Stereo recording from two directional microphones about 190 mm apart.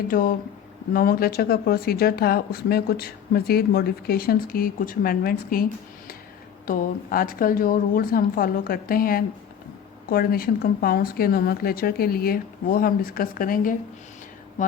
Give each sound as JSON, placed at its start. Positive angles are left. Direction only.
{"t": 0.1, "sound": "speech", "side_deg": 50}
{"t": 6.7, "sound": "speech", "side_deg": 45}